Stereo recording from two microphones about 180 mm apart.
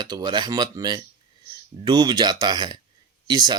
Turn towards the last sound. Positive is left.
turn(degrees=-25)  # may be behind; listen again after turning